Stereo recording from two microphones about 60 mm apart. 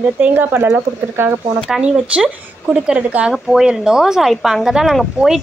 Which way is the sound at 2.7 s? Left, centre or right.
Centre.